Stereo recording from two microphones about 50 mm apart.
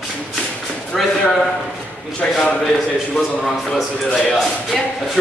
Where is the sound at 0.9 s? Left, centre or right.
Centre.